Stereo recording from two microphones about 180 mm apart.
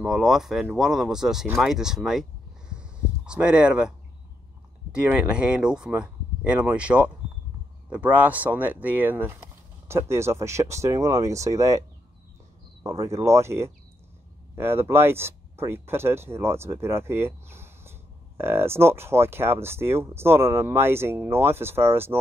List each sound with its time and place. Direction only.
0.0 s speech: centre (ahead or behind)
2.7 s a sound: 5° right (ahead or behind)
4.9 s speech: 5° right (ahead or behind)
12.8 s speech: 15° right (ahead or behind)